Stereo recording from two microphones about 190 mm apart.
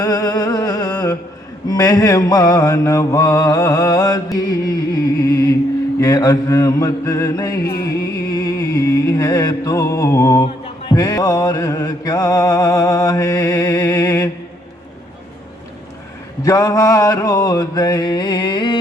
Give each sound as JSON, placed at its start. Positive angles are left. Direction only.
{"t": 0.0, "sound": "music", "side_deg": 20}
{"t": 1.6, "sound": "mantra", "side_deg": 20}
{"t": 7.7, "sound": "music", "side_deg": 15}
{"t": 10.8, "sound": "mantra", "side_deg": 20}
{"t": 16.4, "sound": "mantra", "side_deg": 20}